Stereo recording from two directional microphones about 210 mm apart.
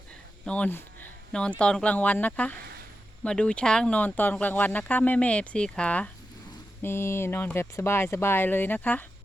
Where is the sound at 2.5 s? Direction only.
50° right (ahead or behind).